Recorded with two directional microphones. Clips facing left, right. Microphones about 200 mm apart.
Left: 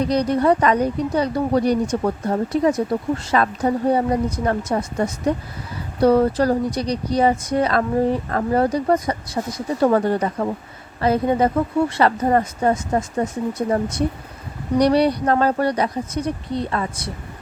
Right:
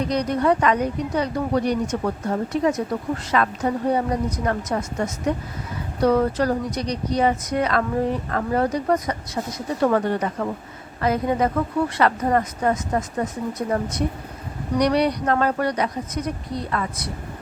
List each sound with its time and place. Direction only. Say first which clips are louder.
0.1 s speech: left 2 dB; 30° left (ahead or behind)